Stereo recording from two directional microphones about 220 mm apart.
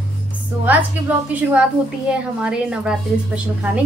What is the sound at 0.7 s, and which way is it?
A woman's voice, 5° right (ahead or behind).